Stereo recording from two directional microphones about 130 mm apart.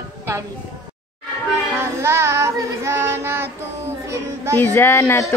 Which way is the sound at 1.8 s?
20° right (ahead or behind).